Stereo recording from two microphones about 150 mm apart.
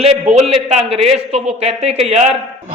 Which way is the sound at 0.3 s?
45° right (ahead or behind).